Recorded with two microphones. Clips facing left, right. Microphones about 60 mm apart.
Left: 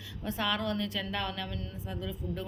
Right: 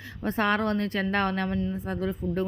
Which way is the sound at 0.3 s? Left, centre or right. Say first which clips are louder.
Right 7 dB; right.